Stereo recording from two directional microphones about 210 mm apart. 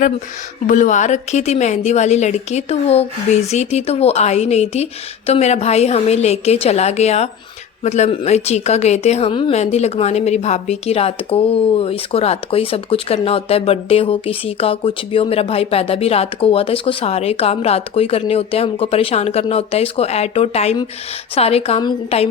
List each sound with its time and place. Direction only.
0.7 s a woman's voice: 35° left (ahead or behind)